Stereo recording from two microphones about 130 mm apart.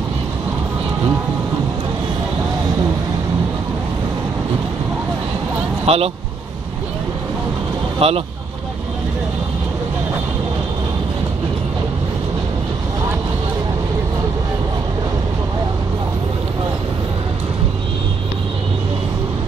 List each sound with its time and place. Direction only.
5.9 s speech: 50° right (ahead or behind)
8.0 s speech: 50° right (ahead or behind)